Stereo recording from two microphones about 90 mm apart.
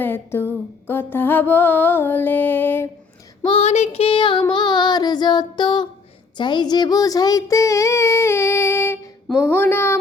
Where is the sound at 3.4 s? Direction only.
90° left; by 9.0 s 30° left (ahead or behind).